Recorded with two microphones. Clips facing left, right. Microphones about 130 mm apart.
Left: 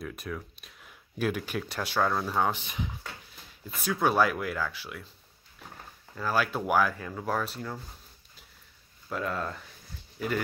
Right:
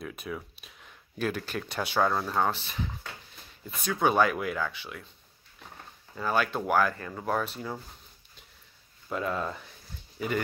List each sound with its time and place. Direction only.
0.0 s speech: centre (ahead or behind)
3.8 s speech: centre (ahead or behind)
6.1 s speech: centre (ahead or behind)
9.1 s speech: centre (ahead or behind)